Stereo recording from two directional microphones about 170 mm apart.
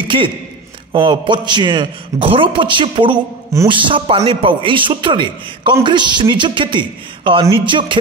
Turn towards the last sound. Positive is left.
turn(degrees=-30)  # may be behind; listen again after turning